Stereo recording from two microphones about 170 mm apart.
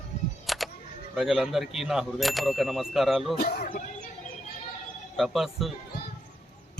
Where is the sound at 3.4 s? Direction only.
50° left (ahead or behind).